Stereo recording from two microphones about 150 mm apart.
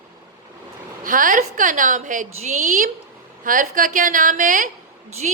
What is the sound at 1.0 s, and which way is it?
A woman's voice, 65° right (ahead or behind).